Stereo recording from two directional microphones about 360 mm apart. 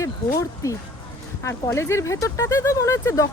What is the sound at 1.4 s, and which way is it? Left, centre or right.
Speech, centre.